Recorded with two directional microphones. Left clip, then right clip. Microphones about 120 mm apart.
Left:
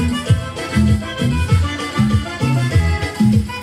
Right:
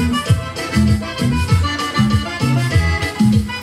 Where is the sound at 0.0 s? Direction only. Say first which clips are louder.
Right 2 dB; 35° right (ahead or behind).